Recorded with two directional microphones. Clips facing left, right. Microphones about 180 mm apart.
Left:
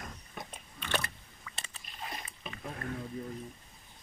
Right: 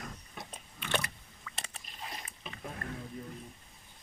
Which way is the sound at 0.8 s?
10° right (ahead or behind).